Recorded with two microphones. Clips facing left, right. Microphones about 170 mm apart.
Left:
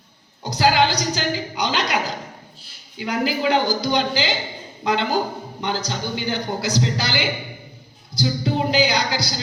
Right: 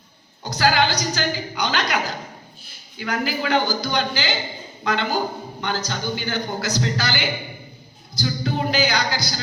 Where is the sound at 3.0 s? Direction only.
20° left (ahead or behind).